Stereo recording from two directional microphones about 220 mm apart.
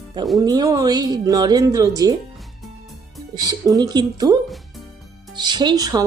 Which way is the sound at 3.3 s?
15° right (ahead or behind).